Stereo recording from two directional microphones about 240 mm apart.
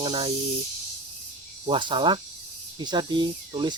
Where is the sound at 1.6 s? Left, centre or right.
Centre.